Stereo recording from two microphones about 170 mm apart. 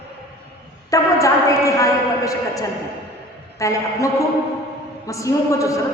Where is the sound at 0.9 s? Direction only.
20° left (ahead or behind).